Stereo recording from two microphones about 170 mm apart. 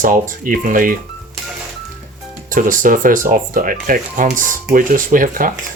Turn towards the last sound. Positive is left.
turn(degrees=-55)  # may be behind; listen again after turning